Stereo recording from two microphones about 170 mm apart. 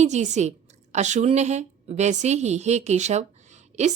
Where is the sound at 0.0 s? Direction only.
45° right (ahead or behind).